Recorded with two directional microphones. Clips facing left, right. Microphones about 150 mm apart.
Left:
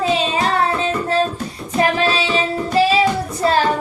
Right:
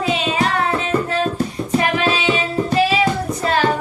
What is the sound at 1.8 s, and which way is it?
Music, 35° left (ahead or behind).